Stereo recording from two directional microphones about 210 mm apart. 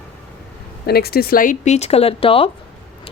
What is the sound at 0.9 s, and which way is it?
Speech, 50° left (ahead or behind).